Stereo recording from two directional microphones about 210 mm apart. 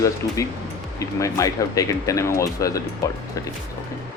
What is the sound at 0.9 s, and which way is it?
Speech, 15° left (ahead or behind).